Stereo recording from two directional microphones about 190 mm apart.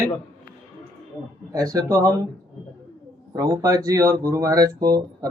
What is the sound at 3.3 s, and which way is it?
Speech, 20° right (ahead or behind).